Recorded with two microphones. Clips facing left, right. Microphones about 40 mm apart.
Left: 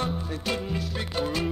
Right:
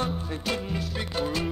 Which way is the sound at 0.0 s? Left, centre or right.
Centre.